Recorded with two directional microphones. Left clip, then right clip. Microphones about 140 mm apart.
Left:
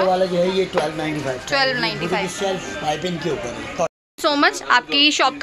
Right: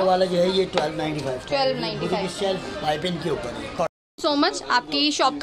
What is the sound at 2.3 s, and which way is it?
Speech, 30° left (ahead or behind).